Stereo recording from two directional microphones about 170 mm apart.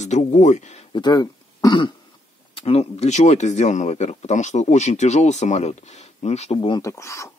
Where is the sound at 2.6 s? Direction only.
35° left (ahead or behind).